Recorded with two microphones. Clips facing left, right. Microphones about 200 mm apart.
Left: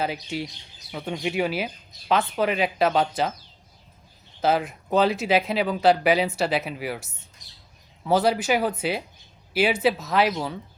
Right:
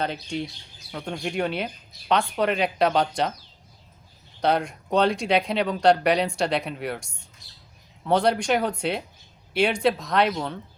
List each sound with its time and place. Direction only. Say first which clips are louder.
0.0 s speech: even; 5° left (ahead or behind)
4.4 s speech: even; 5° left (ahead or behind)
7.4 s squawk: even; 15° left (ahead or behind)
8.0 s speech: even; 5° left (ahead or behind)